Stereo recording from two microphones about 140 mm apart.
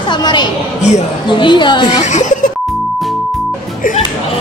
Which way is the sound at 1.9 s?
55° left (ahead or behind).